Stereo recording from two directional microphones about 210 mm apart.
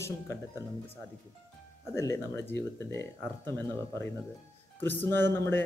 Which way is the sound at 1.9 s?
15° left (ahead or behind).